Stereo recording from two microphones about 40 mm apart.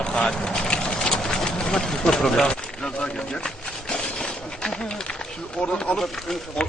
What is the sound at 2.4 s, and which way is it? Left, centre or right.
Speech, left.